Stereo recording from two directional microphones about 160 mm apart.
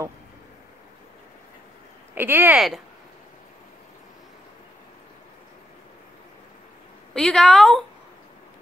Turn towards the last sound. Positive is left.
turn(degrees=0)  # may be behind; listen again after turning